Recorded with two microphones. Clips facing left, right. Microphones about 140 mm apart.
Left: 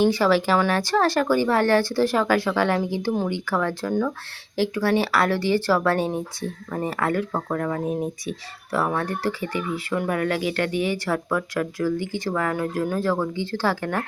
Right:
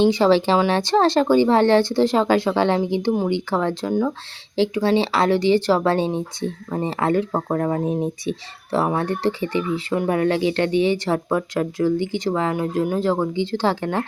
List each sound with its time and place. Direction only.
0.0 s speech: 25° right (ahead or behind)